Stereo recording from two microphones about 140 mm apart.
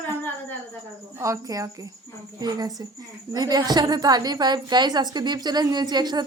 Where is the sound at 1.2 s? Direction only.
25° right (ahead or behind).